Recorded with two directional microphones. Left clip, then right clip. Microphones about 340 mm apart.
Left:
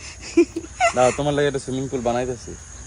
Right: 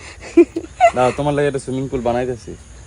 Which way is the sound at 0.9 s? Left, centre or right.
Right.